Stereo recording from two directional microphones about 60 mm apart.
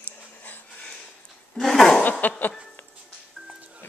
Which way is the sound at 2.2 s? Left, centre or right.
Left.